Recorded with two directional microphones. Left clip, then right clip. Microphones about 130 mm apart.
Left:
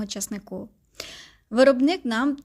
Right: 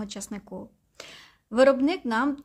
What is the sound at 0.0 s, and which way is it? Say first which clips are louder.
A woman's voice: left 4 dB; 30° left (ahead or behind).